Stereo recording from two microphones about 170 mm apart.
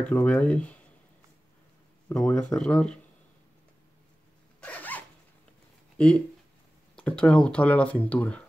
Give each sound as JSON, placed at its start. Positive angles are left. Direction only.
{"t": 0.0, "sound": "speech", "side_deg": 10}
{"t": 2.0, "sound": "speech", "side_deg": 5}
{"t": 4.6, "sound": "zipper", "side_deg": 10}
{"t": 5.9, "sound": "speech", "side_deg": 5}